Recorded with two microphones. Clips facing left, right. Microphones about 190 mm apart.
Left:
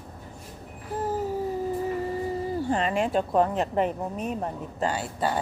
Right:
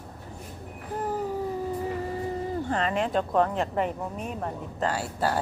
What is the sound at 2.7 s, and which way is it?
Speech, 15° left (ahead or behind).